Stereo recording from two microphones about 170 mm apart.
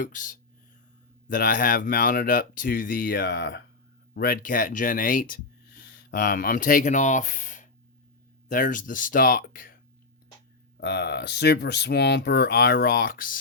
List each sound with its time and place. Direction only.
0.0 s speech: 50° left (ahead or behind); by 3.6 s 75° left (ahead or behind)
4.1 s speech: 60° left (ahead or behind)
10.8 s speech: 75° left (ahead or behind); by 13.4 s 55° left (ahead or behind)